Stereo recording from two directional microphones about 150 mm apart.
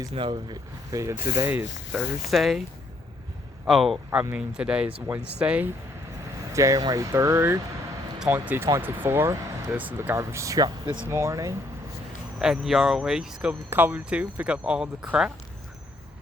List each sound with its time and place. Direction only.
0.1 s speech: 35° right (ahead or behind)
1.9 s speech: centre (ahead or behind)
3.7 s speech: centre (ahead or behind)
6.5 s speech: 20° right (ahead or behind)
8.2 s speech: 10° right (ahead or behind)
12.4 s speech: 5° right (ahead or behind)